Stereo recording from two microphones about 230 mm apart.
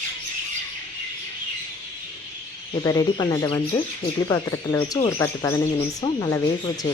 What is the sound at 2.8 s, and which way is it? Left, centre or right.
Speech, centre.